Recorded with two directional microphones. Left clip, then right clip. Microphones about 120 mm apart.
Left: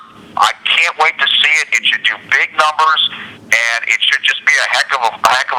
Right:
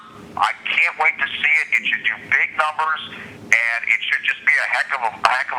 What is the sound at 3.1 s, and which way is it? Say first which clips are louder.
Telephone: left 3 dB; 40° left (ahead or behind).